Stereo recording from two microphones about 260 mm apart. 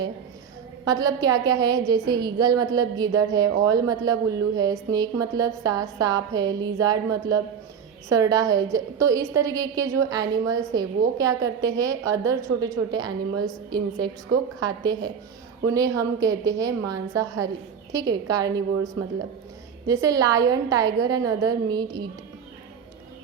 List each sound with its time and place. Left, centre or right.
0.9 s a woman's voice: centre
19.9 s a woman's voice: centre